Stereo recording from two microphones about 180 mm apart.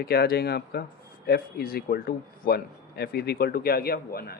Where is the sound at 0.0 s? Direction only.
60° left (ahead or behind).